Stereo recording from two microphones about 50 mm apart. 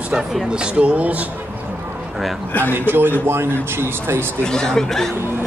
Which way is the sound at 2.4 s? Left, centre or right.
Left.